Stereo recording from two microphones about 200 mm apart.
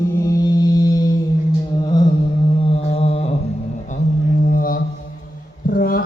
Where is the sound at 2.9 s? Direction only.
30° left (ahead or behind).